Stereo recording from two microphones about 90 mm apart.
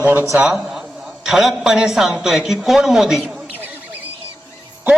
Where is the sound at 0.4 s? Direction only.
5° right (ahead or behind).